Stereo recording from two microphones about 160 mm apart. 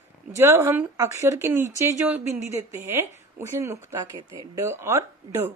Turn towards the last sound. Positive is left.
turn(degrees=-15)  # may be behind; listen again after turning